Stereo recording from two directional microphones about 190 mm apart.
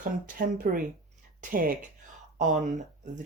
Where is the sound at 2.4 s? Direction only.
40° right (ahead or behind).